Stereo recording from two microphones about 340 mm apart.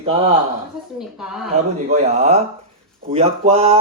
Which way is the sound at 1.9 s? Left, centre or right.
Centre.